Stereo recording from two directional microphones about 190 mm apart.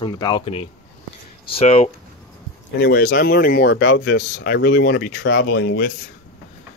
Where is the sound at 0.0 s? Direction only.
20° left (ahead or behind).